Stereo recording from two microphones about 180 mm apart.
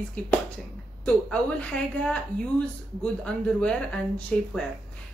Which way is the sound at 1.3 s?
5° left (ahead or behind).